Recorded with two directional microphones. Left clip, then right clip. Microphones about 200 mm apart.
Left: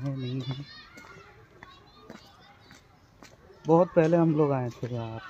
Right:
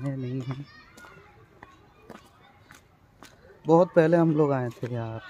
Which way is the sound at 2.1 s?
5° right (ahead or behind).